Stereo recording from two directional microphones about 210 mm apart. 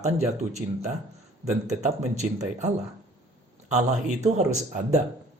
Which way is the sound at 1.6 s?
35° right (ahead or behind).